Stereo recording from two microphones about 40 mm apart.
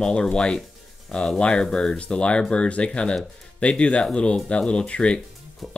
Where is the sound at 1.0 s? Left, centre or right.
Left.